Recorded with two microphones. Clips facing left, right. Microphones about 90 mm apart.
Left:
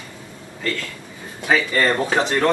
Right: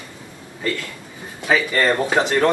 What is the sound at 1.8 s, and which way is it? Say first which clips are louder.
Speech: right 1 dB; 5° right (ahead or behind).